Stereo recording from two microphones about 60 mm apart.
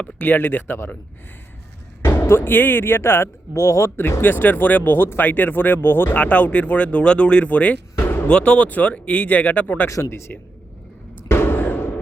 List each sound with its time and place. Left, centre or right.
0.2 s speech: left
2.0 s speech: left
4.2 s speech: left
6.1 s speech: left
7.9 s music: left
8.3 s speech: centre
9.9 s speech: left
11.3 s a sound: left